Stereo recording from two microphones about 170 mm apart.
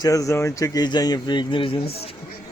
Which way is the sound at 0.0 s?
20° left (ahead or behind).